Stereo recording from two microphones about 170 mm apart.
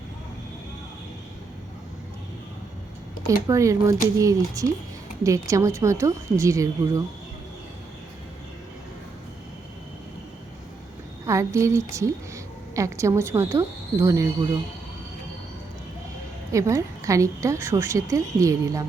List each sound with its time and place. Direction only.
3.4 s a woman's voice: 20° right (ahead or behind)
11.3 s a woman's voice: 15° right (ahead or behind)
16.5 s a woman's voice: 20° right (ahead or behind)